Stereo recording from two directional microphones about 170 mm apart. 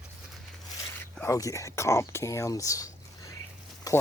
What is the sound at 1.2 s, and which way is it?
Speech, 20° left (ahead or behind).